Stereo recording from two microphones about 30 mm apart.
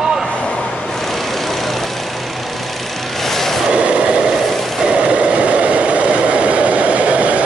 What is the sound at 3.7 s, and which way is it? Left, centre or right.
Vehicle, right.